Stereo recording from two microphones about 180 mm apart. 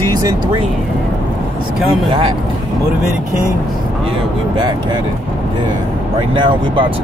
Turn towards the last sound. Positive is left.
turn(degrees=-30)  # may be behind; listen again after turning